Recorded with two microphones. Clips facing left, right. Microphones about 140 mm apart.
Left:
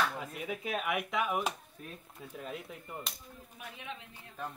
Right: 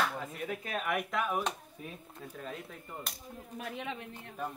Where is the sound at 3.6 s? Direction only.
65° right (ahead or behind).